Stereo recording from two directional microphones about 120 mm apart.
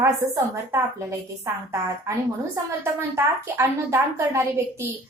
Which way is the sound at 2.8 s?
25° right (ahead or behind).